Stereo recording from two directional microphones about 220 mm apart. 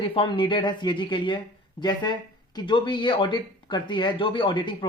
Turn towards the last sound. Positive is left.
turn(degrees=20)  # may be behind; listen again after turning